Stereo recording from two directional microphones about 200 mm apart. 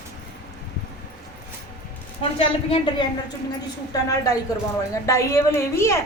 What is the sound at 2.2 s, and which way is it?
A woman's voice, 30° left (ahead or behind).